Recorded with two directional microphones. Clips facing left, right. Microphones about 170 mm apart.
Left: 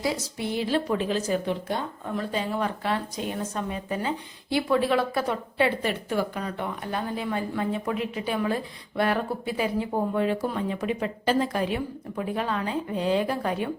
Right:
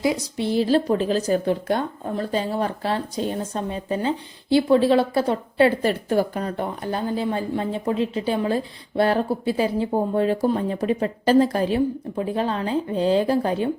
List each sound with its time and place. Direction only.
0.0 s speech: 25° right (ahead or behind)